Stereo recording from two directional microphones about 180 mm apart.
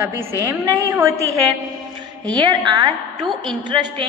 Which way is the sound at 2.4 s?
25° right (ahead or behind).